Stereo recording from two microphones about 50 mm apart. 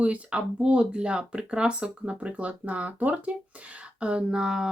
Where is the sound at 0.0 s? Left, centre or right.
Right.